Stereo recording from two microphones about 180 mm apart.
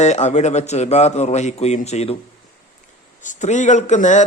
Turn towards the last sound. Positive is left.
turn(degrees=45)  # may be behind; listen again after turning